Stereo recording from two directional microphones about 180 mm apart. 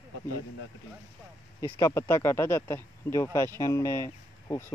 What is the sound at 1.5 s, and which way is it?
Speech, 15° left (ahead or behind).